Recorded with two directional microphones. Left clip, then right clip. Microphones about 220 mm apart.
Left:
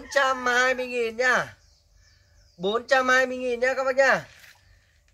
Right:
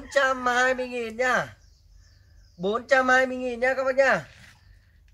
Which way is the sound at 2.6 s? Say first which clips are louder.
Even; 5° left (ahead or behind).